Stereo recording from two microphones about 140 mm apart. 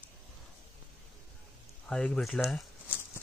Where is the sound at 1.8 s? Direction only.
5° left (ahead or behind).